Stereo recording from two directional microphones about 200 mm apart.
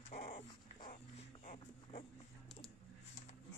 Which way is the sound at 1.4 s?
35° left (ahead or behind).